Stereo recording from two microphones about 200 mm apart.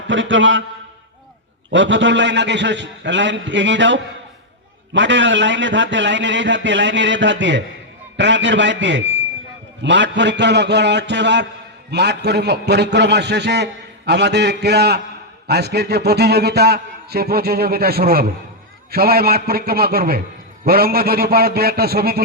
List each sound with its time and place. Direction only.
0.1 s a man's voice: 70° right (ahead or behind)
1.7 s a man's voice: 65° right (ahead or behind)